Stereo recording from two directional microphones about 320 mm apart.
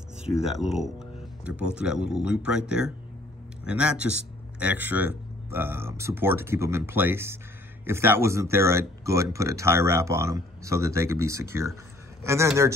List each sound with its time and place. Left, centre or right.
0.4 s speech: centre